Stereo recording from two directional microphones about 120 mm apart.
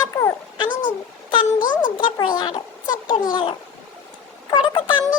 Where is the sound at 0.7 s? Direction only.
90° left.